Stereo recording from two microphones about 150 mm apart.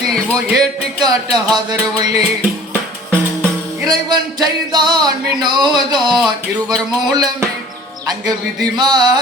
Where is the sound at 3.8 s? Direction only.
25° right (ahead or behind).